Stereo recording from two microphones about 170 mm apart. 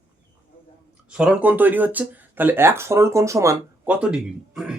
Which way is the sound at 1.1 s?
5° right (ahead or behind).